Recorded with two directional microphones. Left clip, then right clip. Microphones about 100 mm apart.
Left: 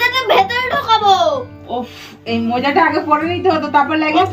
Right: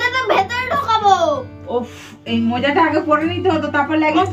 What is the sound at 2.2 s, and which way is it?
A child's voice, 25° right (ahead or behind).